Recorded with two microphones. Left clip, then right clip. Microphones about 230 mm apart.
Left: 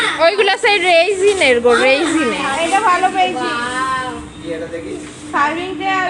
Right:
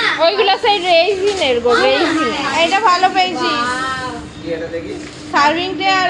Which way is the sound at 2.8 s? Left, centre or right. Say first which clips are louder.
Even; right.